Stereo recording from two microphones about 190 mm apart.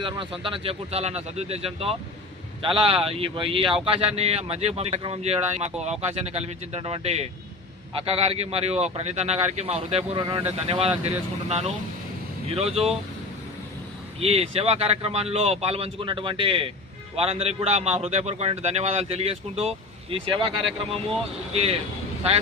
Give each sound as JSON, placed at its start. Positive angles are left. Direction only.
{"t": 0.4, "sound": "speech", "side_deg": -30}
{"t": 14.2, "sound": "speech", "side_deg": -30}